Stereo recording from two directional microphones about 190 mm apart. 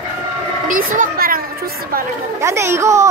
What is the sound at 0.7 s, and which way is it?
Speech, 45° right (ahead or behind).